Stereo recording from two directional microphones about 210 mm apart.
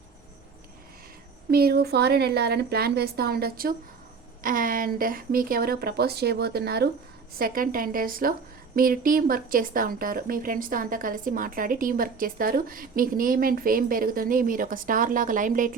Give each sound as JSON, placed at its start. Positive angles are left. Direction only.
{"t": 1.5, "sound": "a woman's voice", "side_deg": -50}